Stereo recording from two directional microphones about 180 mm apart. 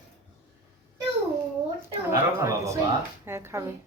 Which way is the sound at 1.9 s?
15° right (ahead or behind).